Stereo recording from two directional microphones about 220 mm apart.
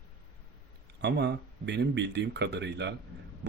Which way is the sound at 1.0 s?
50° right (ahead or behind).